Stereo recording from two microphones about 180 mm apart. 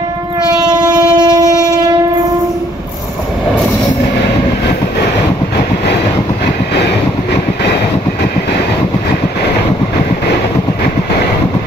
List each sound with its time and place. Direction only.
0.7 s train: 20° right (ahead or behind)